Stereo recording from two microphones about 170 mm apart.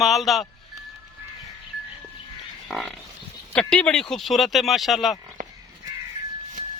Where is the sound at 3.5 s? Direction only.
5° left (ahead or behind).